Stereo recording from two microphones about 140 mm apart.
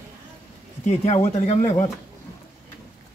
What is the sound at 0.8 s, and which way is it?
Speech, 50° left (ahead or behind).